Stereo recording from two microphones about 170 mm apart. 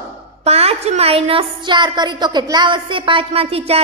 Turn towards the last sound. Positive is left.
turn(degrees=-35)  # may be behind; listen again after turning